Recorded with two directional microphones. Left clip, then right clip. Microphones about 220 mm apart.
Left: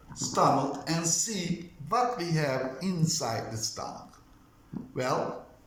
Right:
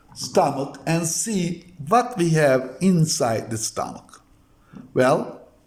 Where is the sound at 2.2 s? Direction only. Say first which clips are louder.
Right 12 dB; 45° right (ahead or behind).